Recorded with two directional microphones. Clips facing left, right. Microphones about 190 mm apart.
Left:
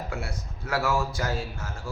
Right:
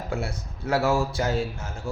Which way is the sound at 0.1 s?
30° right (ahead or behind).